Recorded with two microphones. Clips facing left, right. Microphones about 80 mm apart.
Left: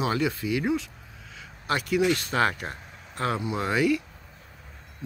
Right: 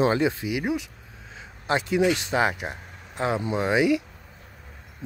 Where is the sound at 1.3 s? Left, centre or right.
Right.